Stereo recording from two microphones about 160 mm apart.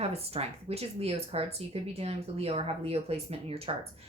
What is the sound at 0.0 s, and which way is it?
A woman's voice, 40° right (ahead or behind).